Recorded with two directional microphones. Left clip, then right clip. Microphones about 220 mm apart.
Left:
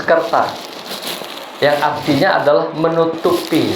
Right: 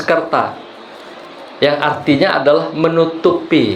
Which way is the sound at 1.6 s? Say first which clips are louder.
Even; 40° right (ahead or behind).